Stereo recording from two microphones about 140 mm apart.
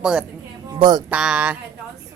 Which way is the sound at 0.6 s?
30° right (ahead or behind).